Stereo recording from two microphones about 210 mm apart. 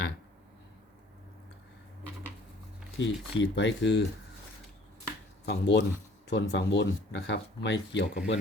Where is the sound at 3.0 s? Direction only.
60° left (ahead or behind).